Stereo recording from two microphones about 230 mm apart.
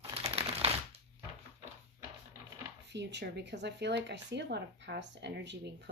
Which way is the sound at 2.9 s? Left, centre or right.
Right.